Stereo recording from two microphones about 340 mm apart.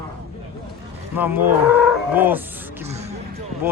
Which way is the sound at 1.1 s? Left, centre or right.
Centre.